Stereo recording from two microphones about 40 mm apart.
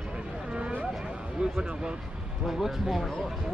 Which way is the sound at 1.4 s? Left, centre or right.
Right.